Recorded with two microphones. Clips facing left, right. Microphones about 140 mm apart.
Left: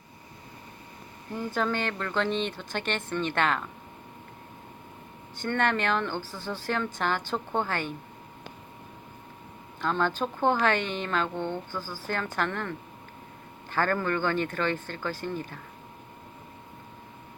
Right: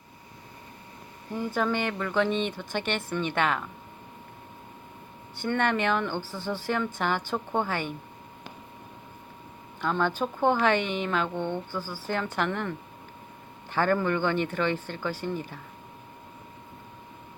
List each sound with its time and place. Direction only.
1.4 s speech: 10° right (ahead or behind)
5.4 s speech: 15° right (ahead or behind)
9.8 s speech: 15° right (ahead or behind)